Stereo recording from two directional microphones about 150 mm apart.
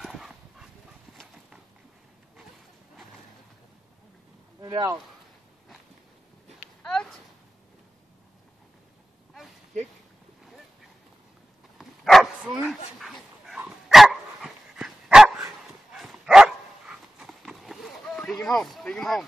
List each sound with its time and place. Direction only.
0.0 s dog: centre (ahead or behind)
4.6 s speech: 25° right (ahead or behind)
6.8 s a sound: 5° left (ahead or behind)
11.8 s dog: centre (ahead or behind)